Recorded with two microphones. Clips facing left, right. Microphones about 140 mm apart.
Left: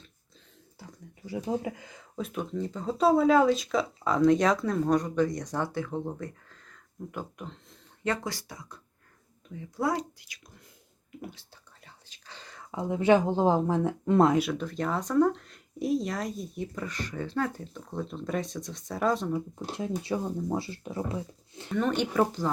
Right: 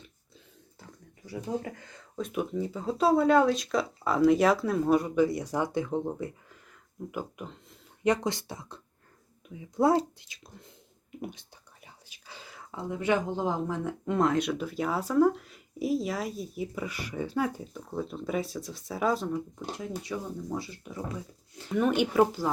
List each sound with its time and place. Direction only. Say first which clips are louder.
1.3 s speech: left 3 dB; 15° left (ahead or behind)
2.3 s speech: right 3 dB; 10° right (ahead or behind)
8.0 s speech: right 5 dB; 20° right (ahead or behind)
11.9 s whispering: even; 10° right (ahead or behind)
12.7 s speech: left 5 dB; 20° left (ahead or behind)
14.3 s speech: left 1 dB; centre (ahead or behind)
19.8 s speech: left 6 dB; 30° left (ahead or behind)
21.7 s speech: right 2 dB; 10° right (ahead or behind)